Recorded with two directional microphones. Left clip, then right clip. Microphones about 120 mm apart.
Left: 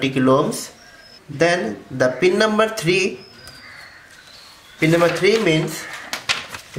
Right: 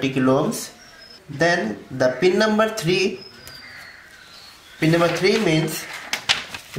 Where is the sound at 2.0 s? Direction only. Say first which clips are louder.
Left 2 dB; 30° left (ahead or behind).